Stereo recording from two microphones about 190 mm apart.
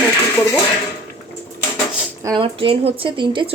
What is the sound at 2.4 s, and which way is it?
Speech, 30° right (ahead or behind).